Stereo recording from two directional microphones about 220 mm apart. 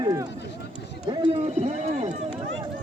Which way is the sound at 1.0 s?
20° right (ahead or behind).